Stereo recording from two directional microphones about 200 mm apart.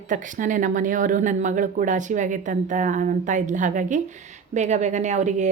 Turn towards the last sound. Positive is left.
turn(degrees=-35)  # may be behind; listen again after turning